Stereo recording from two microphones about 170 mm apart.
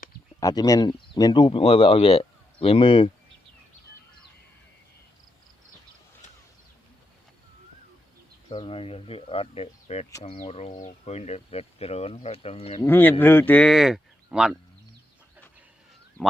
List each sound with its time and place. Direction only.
0.3 s speech: 20° left (ahead or behind)
8.4 s speech: 35° left (ahead or behind)
12.8 s speech: 10° left (ahead or behind); by 14.6 s 5° right (ahead or behind)